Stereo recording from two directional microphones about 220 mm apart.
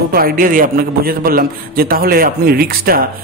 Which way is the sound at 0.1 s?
40° right (ahead or behind).